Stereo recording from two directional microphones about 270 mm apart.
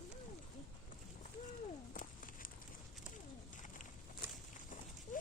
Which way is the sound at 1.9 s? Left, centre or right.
Left.